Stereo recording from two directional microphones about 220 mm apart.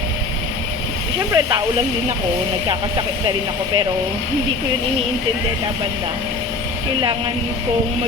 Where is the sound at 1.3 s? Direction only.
15° right (ahead or behind).